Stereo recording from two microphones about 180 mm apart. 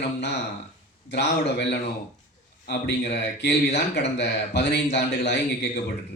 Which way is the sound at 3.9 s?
70° left (ahead or behind).